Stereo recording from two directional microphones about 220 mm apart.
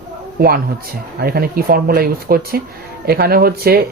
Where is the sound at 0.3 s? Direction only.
45° right (ahead or behind).